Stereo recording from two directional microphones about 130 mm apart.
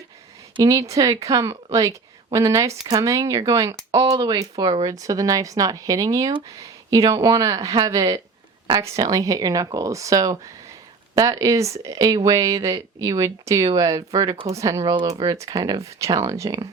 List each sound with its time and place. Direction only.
0.5 s speech: 25° right (ahead or behind)